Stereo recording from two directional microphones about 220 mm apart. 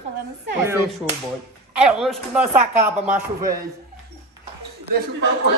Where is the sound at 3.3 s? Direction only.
15° right (ahead or behind).